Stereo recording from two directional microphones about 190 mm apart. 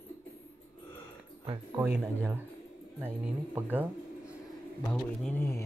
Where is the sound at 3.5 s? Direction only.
10° right (ahead or behind).